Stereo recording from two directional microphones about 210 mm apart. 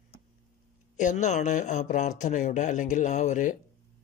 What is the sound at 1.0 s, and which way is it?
Speech, 35° left (ahead or behind).